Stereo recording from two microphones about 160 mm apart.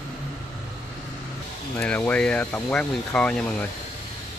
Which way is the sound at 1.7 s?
10° left (ahead or behind).